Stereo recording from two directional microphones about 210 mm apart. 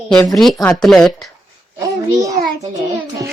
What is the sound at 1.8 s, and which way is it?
Speech, 15° right (ahead or behind).